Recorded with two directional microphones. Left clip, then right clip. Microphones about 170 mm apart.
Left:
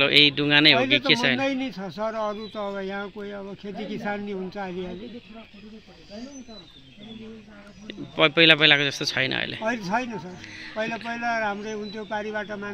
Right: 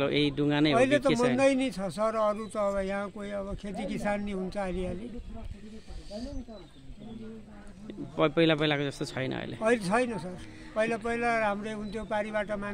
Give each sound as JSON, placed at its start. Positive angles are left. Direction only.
{"t": 0.0, "sound": "speech", "side_deg": -5}
{"t": 1.4, "sound": "speech", "side_deg": -35}
{"t": 7.8, "sound": "speech", "side_deg": -5}
{"t": 9.7, "sound": "a man's voice", "side_deg": -30}